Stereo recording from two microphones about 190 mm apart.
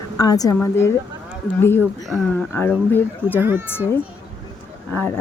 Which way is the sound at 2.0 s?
5° left (ahead or behind).